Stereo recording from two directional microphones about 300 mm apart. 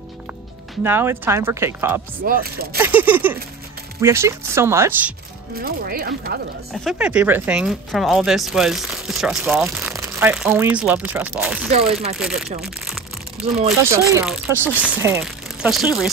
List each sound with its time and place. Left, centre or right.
0.8 s speech: centre
2.2 s speech: right
2.8 s speech: centre
5.6 s speech: right
6.7 s speech: centre
11.9 s speech: centre
12.2 s speech: centre